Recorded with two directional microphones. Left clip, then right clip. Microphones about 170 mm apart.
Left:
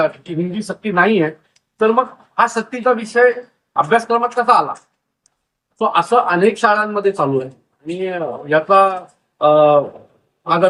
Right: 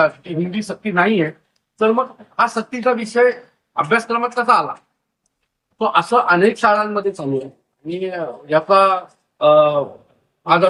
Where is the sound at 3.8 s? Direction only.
10° left (ahead or behind).